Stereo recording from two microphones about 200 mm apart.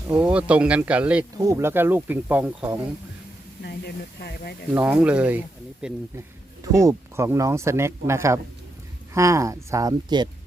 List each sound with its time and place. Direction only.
0.1 s speech: 5° right (ahead or behind)
3.6 s speech: 55° left (ahead or behind)
4.7 s speech: 10° right (ahead or behind)